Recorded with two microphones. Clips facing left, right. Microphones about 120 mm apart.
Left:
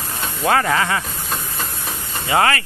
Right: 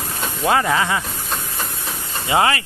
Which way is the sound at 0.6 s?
10° right (ahead or behind).